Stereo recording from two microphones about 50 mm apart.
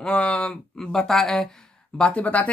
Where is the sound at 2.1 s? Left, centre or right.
Left.